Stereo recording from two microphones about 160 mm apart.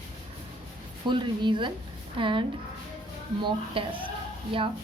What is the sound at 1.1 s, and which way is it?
A woman's voice, 30° right (ahead or behind).